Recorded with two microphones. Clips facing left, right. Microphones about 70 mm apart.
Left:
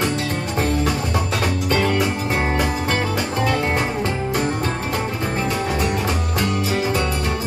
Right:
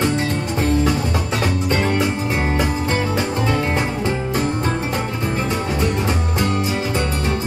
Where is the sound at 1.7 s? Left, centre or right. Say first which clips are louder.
Left 1 dB; right.